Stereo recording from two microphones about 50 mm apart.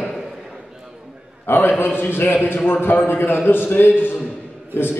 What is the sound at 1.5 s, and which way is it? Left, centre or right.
A man's voice, left.